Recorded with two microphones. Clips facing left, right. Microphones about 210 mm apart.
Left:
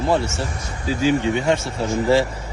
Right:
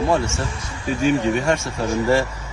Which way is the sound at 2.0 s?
15° left (ahead or behind).